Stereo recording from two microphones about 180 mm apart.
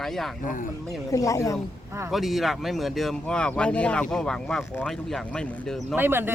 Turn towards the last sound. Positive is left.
turn(degrees=-10)  # may be behind; listen again after turning